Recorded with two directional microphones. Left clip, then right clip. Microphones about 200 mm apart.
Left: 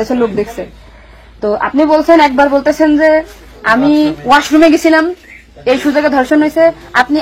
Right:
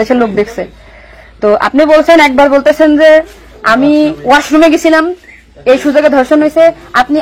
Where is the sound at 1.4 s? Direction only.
40° right (ahead or behind).